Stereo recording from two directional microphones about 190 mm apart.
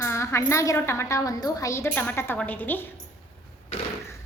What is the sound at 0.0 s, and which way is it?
Speech, 15° left (ahead or behind).